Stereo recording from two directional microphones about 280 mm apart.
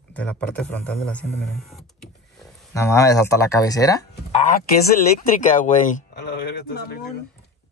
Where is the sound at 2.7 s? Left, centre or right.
Centre.